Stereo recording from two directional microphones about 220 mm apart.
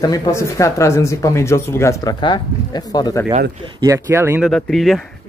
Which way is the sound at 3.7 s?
15° right (ahead or behind).